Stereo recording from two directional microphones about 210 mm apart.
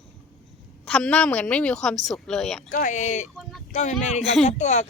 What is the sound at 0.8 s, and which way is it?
Speech, 5° left (ahead or behind).